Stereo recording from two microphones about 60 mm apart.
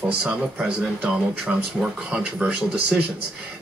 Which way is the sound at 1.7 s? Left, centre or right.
Centre.